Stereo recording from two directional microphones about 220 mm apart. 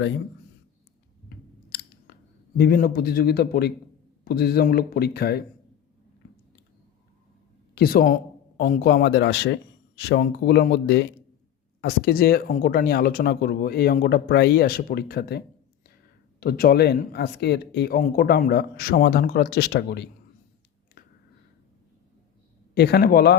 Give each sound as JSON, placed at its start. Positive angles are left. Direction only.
{"t": 2.6, "sound": "speech", "side_deg": 40}
{"t": 7.8, "sound": "speech", "side_deg": 45}
{"t": 22.7, "sound": "speech", "side_deg": 45}